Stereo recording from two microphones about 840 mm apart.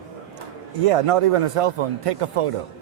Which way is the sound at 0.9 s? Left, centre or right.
Right.